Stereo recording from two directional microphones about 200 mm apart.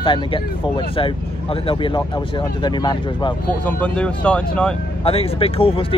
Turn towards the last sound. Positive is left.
turn(degrees=25)  # may be behind; listen again after turning